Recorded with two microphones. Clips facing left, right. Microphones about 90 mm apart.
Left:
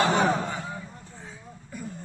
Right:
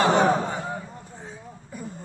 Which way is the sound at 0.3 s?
35° right (ahead or behind).